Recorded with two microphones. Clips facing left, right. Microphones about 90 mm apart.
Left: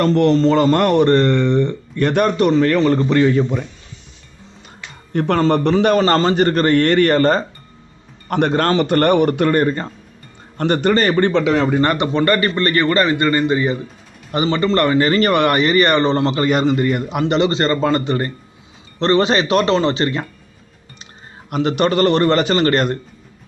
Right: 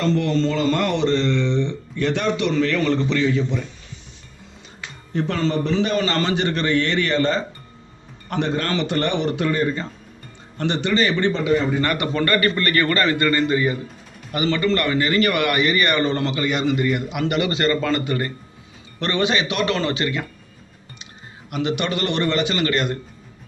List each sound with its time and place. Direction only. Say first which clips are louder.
0.0 s speech: left 6 dB; 60° left (ahead or behind)
5.1 s speech: left 6 dB; 60° left (ahead or behind)
6.1 s speech: left 7 dB; 45° left (ahead or behind)
8.3 s speech: left 7 dB; 60° left (ahead or behind)
11.3 s speech: left 4 dB; 85° left
11.8 s a man's voice: left 5 dB; 30° left (ahead or behind)
21.5 s a man's voice: left 7 dB; 40° left (ahead or behind)